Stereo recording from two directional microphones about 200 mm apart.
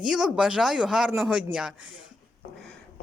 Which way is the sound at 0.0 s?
Centre (ahead or behind).